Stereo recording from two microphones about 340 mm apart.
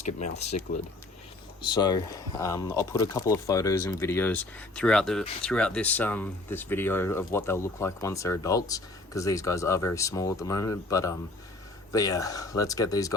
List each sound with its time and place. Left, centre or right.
0.0 s speech: centre
1.6 s speech: centre